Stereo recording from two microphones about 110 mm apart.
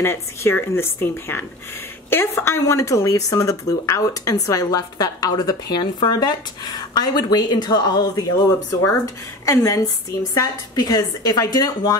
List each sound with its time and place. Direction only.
0.0 s speech: 25° left (ahead or behind)